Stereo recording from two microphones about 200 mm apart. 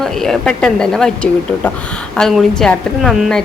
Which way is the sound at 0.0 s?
Centre (ahead or behind).